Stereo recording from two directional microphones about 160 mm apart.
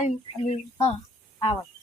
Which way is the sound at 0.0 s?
45° left (ahead or behind).